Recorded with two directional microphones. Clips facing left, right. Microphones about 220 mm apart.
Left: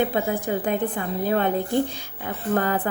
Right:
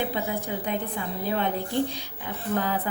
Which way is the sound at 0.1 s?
50° left (ahead or behind).